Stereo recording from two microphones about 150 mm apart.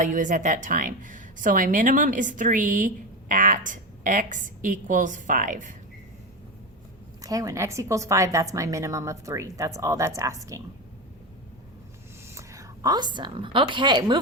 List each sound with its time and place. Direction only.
0.0 s a woman's voice: 60° right (ahead or behind)
7.2 s a woman's voice: 25° right (ahead or behind)
12.3 s a woman's voice: 20° right (ahead or behind)